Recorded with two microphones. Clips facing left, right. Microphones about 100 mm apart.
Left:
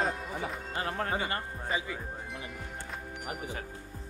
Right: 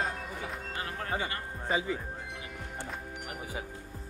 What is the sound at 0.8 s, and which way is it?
Speech, 35° left (ahead or behind).